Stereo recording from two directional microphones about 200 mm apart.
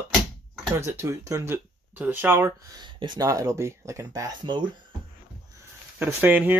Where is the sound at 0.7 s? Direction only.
15° right (ahead or behind).